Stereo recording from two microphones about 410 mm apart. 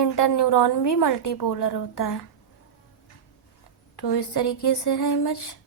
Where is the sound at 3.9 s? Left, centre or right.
Left.